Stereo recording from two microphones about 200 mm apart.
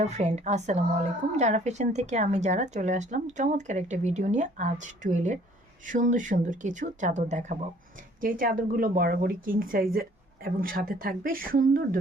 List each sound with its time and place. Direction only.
0.0 s speech: 35° right (ahead or behind)